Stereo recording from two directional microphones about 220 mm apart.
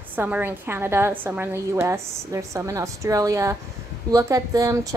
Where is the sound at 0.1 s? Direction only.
10° right (ahead or behind).